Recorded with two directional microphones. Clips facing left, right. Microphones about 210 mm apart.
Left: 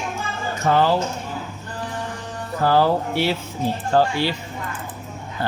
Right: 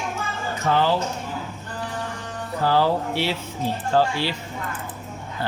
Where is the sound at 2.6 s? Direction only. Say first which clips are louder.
Left 3 dB; 50° left (ahead or behind).